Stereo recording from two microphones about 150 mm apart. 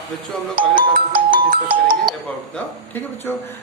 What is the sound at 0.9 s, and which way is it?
Speech, 75° right (ahead or behind).